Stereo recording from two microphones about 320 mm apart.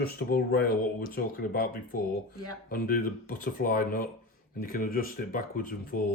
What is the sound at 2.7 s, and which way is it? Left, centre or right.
Speech, left.